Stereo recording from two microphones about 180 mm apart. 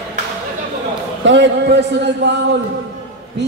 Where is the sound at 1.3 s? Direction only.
75° right (ahead or behind).